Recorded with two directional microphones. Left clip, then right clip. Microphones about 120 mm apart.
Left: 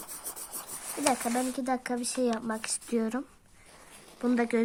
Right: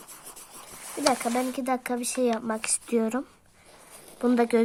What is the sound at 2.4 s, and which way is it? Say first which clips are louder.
Speech: right 4 dB; 25° right (ahead or behind).